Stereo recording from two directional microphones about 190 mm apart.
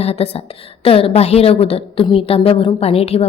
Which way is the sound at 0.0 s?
30° left (ahead or behind).